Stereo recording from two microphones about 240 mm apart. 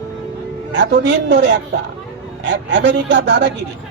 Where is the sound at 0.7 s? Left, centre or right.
Right.